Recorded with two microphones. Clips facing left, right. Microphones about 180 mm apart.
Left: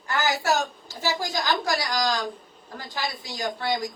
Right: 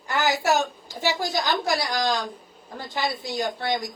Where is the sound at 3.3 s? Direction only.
20° right (ahead or behind).